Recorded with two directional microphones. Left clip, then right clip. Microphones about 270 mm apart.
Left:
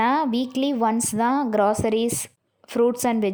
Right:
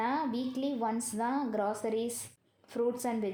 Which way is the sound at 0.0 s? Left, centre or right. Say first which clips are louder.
Left 11 dB; left.